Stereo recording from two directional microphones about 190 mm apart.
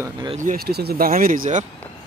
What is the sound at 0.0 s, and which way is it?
Speech, 25° right (ahead or behind).